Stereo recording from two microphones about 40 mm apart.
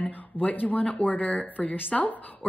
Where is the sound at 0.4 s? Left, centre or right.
Left.